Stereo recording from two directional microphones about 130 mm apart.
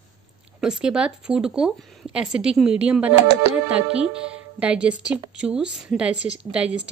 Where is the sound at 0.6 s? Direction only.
5° right (ahead or behind).